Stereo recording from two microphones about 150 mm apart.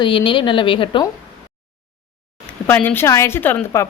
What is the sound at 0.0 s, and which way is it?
Speech, 35° left (ahead or behind).